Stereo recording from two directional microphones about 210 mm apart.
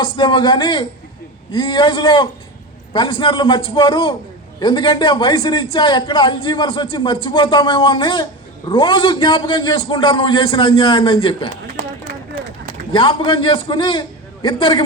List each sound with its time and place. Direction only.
0.0 s a man's voice: 25° left (ahead or behind)
12.9 s a man's voice: 25° left (ahead or behind)